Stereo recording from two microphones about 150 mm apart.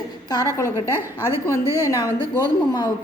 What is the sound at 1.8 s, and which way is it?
Speech, 20° left (ahead or behind).